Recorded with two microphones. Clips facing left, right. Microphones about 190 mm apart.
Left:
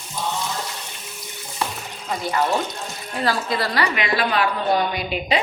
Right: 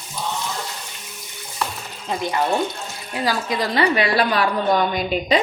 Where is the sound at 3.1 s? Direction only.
10° right (ahead or behind).